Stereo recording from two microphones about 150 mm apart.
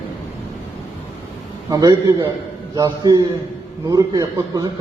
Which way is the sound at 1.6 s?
25° right (ahead or behind).